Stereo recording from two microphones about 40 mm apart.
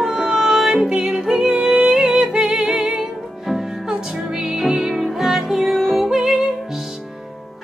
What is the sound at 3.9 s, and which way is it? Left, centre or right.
Music, centre.